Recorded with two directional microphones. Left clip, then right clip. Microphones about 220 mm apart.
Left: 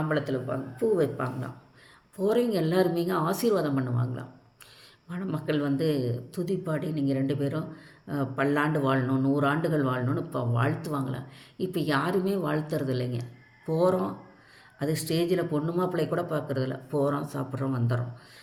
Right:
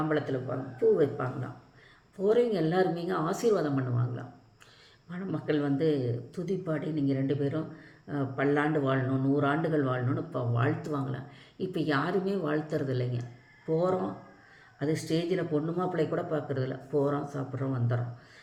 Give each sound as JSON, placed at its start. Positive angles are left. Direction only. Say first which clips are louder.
{"t": 0.1, "sound": "speech", "louder": "left 2 dB", "side_deg": 50}